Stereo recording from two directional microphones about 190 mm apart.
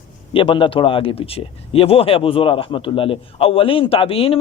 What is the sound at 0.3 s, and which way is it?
Speech, 25° left (ahead or behind).